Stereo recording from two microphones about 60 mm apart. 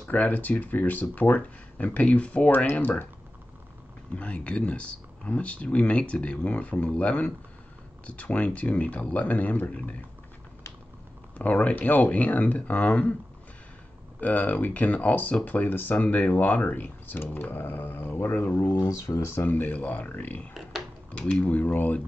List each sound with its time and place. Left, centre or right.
0.1 s speech: left
4.1 s speech: centre
11.3 s speech: left
14.2 s speech: left
18.9 s speech: left
19.4 s speech: left
21.2 s speech: centre